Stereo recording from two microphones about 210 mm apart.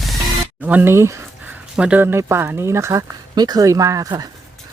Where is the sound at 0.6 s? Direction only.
10° right (ahead or behind).